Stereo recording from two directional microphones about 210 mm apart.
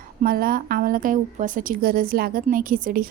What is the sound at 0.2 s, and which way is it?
A woman's voice, 45° right (ahead or behind).